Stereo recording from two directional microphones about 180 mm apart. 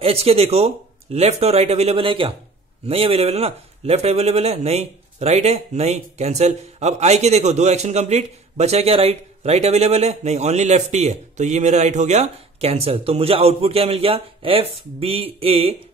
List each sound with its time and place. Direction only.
0.0 s a man's voice: 35° right (ahead or behind)